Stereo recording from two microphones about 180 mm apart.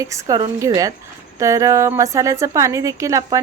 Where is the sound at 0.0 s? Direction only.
15° right (ahead or behind).